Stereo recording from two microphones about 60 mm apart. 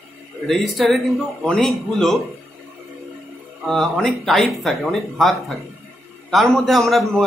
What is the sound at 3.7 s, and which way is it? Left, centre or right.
A man's voice, centre.